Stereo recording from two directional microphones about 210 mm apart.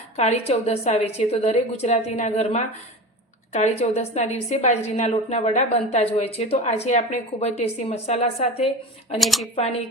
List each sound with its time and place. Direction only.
0.2 s a woman's voice: 30° left (ahead or behind)
9.1 s speech: centre (ahead or behind)